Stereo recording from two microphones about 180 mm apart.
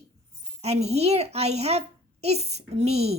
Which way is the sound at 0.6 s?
35° right (ahead or behind).